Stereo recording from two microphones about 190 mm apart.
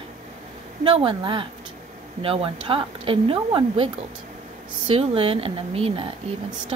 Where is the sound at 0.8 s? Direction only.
30° right (ahead or behind).